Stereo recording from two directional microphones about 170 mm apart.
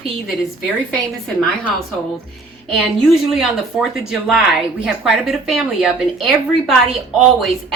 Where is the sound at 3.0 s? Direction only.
Centre (ahead or behind).